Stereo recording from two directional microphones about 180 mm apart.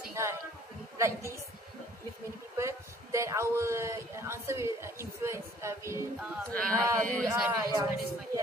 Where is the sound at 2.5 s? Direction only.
15° right (ahead or behind).